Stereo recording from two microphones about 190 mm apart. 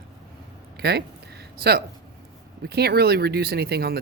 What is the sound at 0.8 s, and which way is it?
Speech, 60° right (ahead or behind).